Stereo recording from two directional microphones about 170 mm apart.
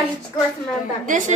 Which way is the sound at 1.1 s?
50° right (ahead or behind).